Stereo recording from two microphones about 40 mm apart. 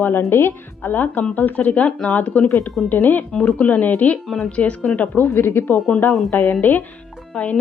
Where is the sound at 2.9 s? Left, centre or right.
Left.